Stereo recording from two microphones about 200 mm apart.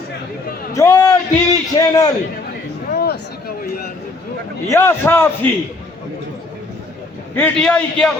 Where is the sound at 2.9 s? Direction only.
55° left (ahead or behind).